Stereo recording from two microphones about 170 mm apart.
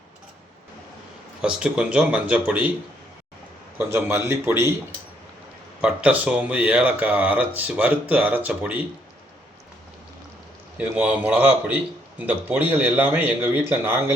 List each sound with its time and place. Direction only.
1.4 s a man's voice: 5° right (ahead or behind)
3.8 s a man's voice: 15° right (ahead or behind)
5.8 s a man's voice: 10° right (ahead or behind)
10.8 s a man's voice: 10° right (ahead or behind)